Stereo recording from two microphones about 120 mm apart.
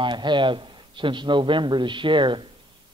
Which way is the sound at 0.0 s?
40° right (ahead or behind).